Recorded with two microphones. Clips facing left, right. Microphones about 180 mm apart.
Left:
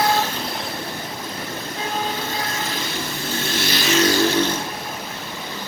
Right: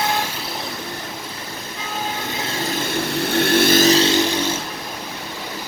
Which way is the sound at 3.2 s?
60° right (ahead or behind).